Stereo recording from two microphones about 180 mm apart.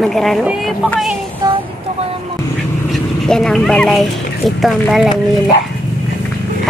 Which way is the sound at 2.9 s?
5° left (ahead or behind).